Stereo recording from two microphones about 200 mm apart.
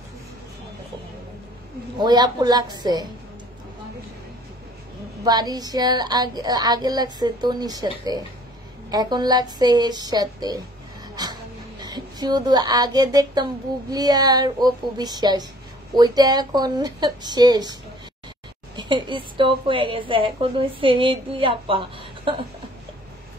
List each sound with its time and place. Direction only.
2.0 s speech: 20° right (ahead or behind)
5.2 s speech: 20° right (ahead or behind)
8.9 s speech: 20° right (ahead or behind)
11.2 s a sound: 20° right (ahead or behind)
11.8 s speech: 20° right (ahead or behind)
18.8 s speech: 25° right (ahead or behind)